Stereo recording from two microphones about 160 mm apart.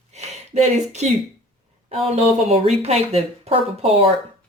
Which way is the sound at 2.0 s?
40° right (ahead or behind).